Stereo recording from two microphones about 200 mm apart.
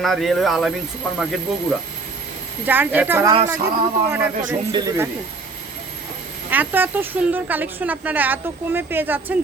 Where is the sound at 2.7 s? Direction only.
10° right (ahead or behind).